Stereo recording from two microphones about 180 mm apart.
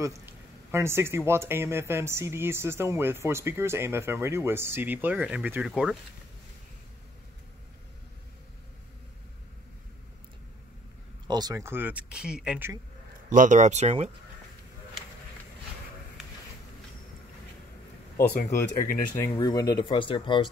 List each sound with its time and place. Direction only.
0.7 s speech: 15° right (ahead or behind)
11.2 s speech: 20° right (ahead or behind)
13.3 s speech: 45° right (ahead or behind)
18.1 s a sound: 60° left (ahead or behind)
18.8 s speech: 50° left (ahead or behind)
19.3 s speech: 20° left (ahead or behind)